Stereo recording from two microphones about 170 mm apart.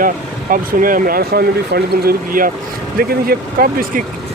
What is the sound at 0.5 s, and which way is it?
Speech, 55° right (ahead or behind).